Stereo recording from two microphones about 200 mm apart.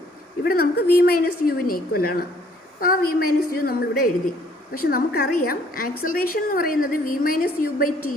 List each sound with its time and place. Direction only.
0.4 s a woman's voice: 50° left (ahead or behind)